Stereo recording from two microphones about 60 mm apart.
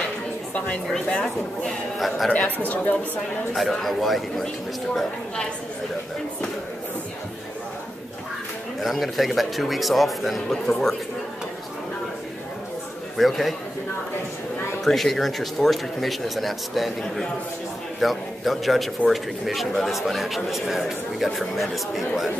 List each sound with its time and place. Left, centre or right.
1.2 s a man's voice: centre
2.7 s a woman's voice: left
3.5 s a man's voice: centre
8.8 s a man's voice: centre
13.2 s a man's voice: centre
14.9 s a man's voice: centre
18.0 s a man's voice: centre